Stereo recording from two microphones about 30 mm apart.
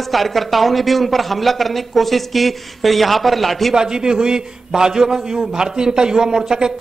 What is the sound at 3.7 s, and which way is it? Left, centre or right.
A man's voice, right.